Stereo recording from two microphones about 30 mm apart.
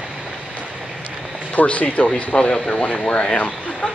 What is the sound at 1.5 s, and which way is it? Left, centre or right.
Speech, left.